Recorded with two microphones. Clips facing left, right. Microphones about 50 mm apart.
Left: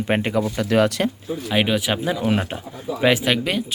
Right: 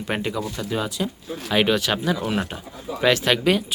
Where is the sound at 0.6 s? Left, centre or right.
Left.